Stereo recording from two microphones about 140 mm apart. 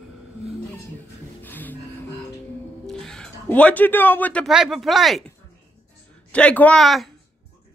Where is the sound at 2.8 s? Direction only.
5° left (ahead or behind).